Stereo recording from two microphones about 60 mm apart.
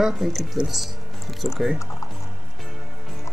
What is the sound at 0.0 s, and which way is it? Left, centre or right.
Speech, centre.